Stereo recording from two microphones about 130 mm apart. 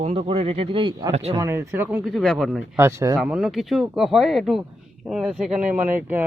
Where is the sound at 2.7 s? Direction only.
20° right (ahead or behind).